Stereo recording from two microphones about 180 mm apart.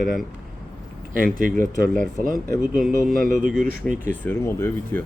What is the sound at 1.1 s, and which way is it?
Speech, 50° right (ahead or behind).